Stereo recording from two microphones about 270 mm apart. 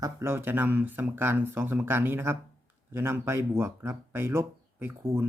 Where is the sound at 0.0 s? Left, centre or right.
Centre.